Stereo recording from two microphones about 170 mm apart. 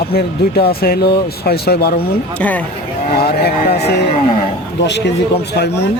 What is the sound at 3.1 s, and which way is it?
Speech, 65° left (ahead or behind).